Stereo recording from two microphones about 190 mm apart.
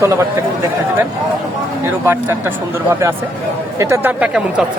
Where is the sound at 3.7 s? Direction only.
15° right (ahead or behind).